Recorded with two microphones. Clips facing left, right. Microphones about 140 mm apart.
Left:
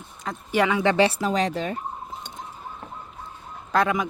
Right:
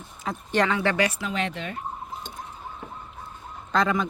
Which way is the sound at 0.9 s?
30° left (ahead or behind).